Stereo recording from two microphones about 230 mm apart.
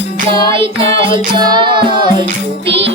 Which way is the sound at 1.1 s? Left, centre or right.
Centre.